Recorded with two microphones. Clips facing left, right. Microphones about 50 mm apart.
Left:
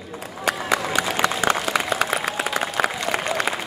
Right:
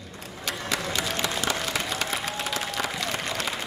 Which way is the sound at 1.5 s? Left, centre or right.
Left.